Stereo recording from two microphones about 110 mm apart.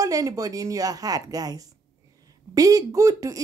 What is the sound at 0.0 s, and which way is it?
A woman's voice, 30° right (ahead or behind).